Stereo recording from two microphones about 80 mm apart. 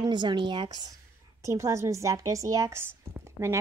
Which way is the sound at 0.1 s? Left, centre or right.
Right.